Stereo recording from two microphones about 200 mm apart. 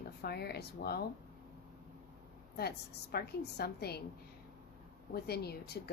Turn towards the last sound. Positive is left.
turn(degrees=55)  # may be behind; listen again after turning